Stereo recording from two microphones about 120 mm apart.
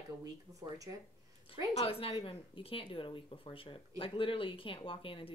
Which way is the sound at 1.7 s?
55° left (ahead or behind).